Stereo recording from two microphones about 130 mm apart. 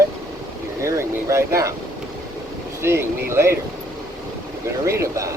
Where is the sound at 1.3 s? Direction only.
20° right (ahead or behind).